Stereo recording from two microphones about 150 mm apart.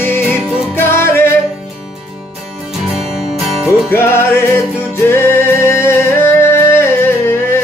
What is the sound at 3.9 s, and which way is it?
Music, 15° left (ahead or behind).